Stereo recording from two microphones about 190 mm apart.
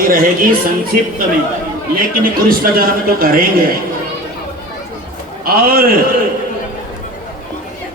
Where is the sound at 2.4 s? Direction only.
50° right (ahead or behind).